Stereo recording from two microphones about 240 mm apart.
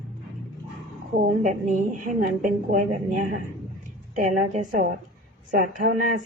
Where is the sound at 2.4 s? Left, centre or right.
Right.